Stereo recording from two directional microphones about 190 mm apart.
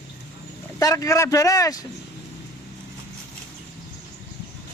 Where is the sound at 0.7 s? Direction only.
15° left (ahead or behind).